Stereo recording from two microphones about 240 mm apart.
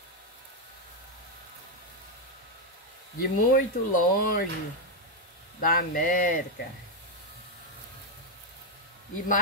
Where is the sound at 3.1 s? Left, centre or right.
Left.